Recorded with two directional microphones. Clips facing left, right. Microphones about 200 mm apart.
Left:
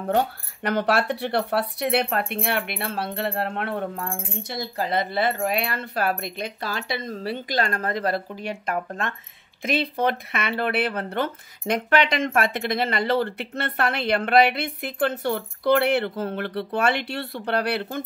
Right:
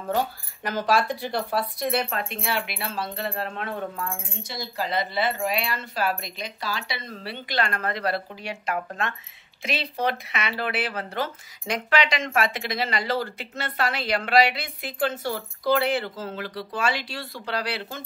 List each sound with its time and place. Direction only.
0.1 s speech: 65° left (ahead or behind); by 8.5 s 45° left (ahead or behind)
9.6 s speech: 50° left (ahead or behind)